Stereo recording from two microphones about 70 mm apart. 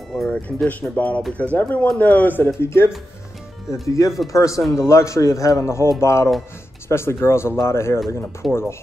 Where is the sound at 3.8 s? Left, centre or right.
Left.